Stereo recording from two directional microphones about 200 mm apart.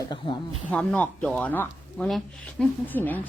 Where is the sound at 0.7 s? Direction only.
5° left (ahead or behind).